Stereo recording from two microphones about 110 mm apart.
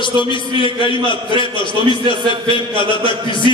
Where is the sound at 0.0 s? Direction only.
50° left (ahead or behind).